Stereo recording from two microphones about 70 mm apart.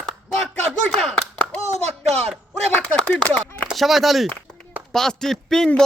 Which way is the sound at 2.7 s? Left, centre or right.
Centre.